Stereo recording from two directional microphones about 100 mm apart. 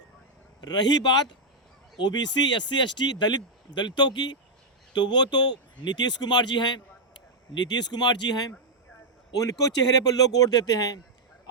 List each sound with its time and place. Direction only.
0.6 s speech: 45° left (ahead or behind)